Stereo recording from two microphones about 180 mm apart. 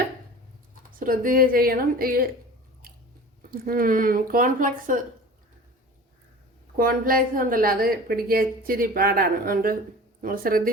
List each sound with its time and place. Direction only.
0.9 s a woman's voice: 50° right (ahead or behind)
3.5 s a woman's voice: 55° right (ahead or behind)
6.7 s a woman's voice: 55° right (ahead or behind)